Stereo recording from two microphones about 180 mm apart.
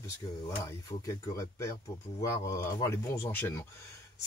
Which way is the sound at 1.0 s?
15° left (ahead or behind).